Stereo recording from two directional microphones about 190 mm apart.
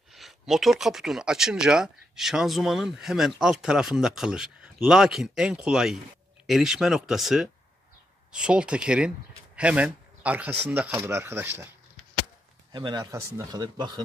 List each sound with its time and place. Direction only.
0.1 s speech: centre (ahead or behind)
12.7 s speech: 25° right (ahead or behind)